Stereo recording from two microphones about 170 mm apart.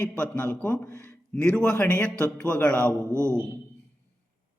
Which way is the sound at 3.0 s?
15° right (ahead or behind).